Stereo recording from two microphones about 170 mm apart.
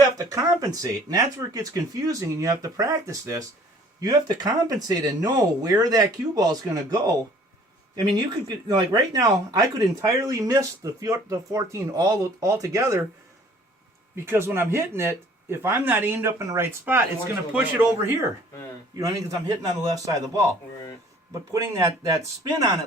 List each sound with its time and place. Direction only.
0.2 s speech: 20° right (ahead or behind)
8.1 s speech: 25° right (ahead or behind)
14.3 s speech: 15° right (ahead or behind)